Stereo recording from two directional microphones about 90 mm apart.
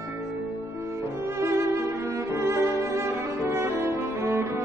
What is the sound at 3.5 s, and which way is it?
Cello, 30° right (ahead or behind).